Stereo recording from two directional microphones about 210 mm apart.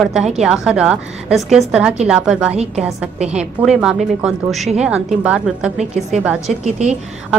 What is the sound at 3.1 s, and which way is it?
Speech, 30° right (ahead or behind).